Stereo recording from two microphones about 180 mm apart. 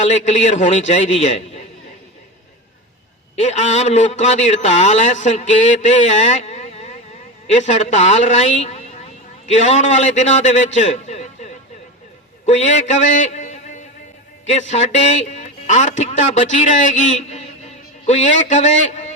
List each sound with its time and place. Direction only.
0.0 s a man's voice: 40° left (ahead or behind)
3.3 s a man's voice: 40° left (ahead or behind)
12.5 s a man's voice: 40° left (ahead or behind)